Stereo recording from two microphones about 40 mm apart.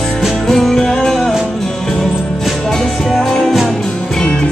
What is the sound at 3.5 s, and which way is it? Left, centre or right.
Music, centre.